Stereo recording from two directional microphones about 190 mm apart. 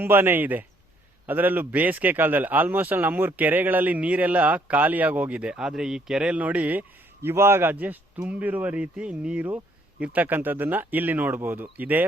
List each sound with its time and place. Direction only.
0.0 s a man's voice: 10° right (ahead or behind)